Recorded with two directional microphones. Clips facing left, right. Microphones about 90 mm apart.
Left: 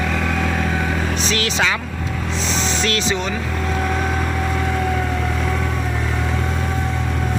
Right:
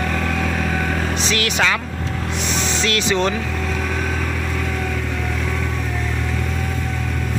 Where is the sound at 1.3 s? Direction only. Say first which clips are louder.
Right 1 dB; 30° left (ahead or behind).